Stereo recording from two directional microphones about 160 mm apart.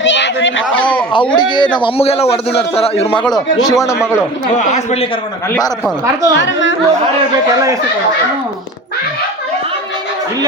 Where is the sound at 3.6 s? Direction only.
20° left (ahead or behind).